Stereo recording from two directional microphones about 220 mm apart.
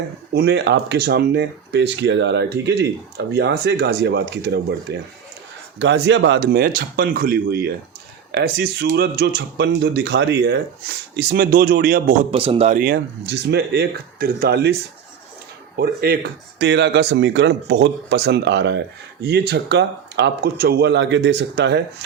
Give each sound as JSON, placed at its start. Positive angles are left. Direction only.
{"t": 0.3, "sound": "speech", "side_deg": -50}
{"t": 12.3, "sound": "speech", "side_deg": -25}
{"t": 15.8, "sound": "speech", "side_deg": -45}